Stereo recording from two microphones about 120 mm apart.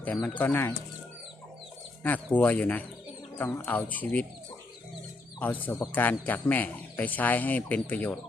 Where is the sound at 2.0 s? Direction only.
15° left (ahead or behind).